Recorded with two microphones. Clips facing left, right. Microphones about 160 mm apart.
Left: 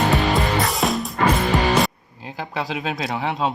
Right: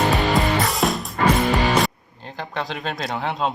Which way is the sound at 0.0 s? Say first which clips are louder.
Even; centre (ahead or behind).